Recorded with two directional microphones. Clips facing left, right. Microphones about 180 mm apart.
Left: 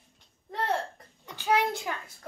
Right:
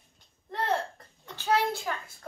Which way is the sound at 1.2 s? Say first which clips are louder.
Left 1 dB; 10° left (ahead or behind).